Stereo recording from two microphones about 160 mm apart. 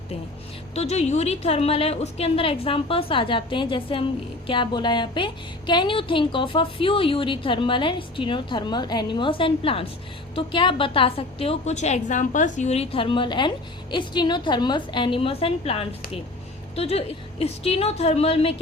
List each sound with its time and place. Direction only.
0.7 s a woman's voice: 40° left (ahead or behind)